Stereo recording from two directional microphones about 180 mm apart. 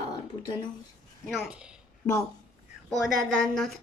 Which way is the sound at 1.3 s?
5° right (ahead or behind).